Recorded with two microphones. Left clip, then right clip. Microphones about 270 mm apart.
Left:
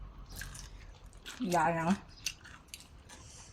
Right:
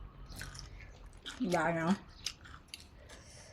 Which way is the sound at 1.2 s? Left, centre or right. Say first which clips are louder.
Left 3 dB; centre.